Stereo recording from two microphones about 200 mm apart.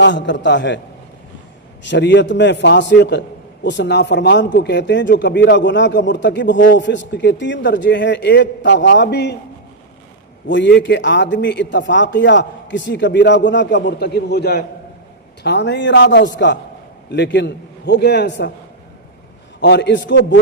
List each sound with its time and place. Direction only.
0.0 s a man's voice: 65° left (ahead or behind)
1.9 s a man's voice: 60° left (ahead or behind)
10.5 s a man's voice: 65° left (ahead or behind)
19.5 s a man's voice: 60° left (ahead or behind)